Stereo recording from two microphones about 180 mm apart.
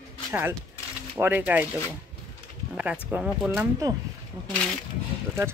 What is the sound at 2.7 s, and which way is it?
Speech, 10° right (ahead or behind).